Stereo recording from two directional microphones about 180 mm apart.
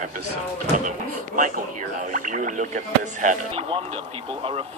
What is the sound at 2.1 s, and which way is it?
A man's voice, 45° right (ahead or behind).